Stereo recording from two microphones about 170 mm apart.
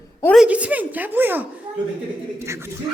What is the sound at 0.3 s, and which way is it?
Speech, 5° right (ahead or behind).